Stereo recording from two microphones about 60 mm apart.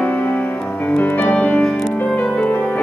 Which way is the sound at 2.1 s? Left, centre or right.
Left.